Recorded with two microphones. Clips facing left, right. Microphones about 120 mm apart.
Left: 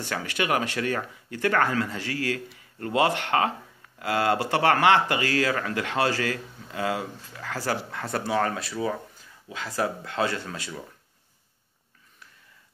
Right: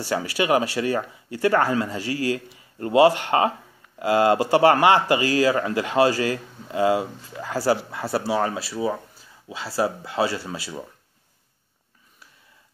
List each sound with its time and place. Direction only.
0.1 s speech: 20° right (ahead or behind)
9.5 s speech: 30° right (ahead or behind)
10.0 s speech: 10° right (ahead or behind)